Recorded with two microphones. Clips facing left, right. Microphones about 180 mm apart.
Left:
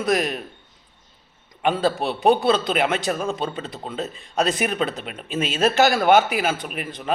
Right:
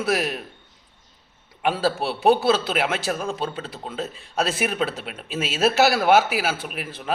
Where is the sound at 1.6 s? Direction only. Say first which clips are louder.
Left 2 dB; 5° right (ahead or behind).